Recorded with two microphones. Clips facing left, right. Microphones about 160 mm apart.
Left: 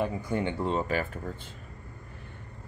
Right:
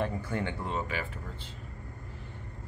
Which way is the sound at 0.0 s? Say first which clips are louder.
Left 3 dB; 15° left (ahead or behind).